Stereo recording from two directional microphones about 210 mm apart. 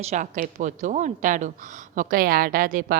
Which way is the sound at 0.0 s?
35° right (ahead or behind).